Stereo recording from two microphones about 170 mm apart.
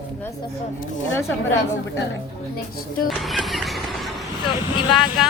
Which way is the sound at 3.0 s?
Centre (ahead or behind).